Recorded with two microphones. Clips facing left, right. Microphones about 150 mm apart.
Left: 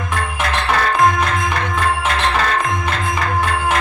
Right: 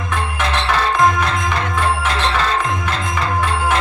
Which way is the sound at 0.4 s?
25° right (ahead or behind).